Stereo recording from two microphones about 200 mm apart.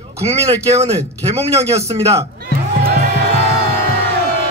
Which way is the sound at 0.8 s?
30° right (ahead or behind).